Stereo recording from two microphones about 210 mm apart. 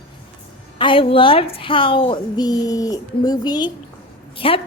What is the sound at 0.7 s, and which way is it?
A woman's voice, 25° left (ahead or behind).